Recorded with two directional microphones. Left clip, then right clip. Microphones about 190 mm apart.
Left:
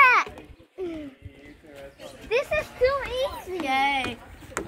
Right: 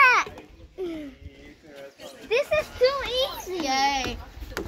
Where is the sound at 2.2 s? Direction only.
55° right (ahead or behind).